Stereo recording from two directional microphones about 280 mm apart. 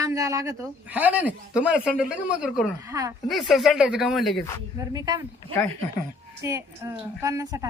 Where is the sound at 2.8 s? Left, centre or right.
Centre.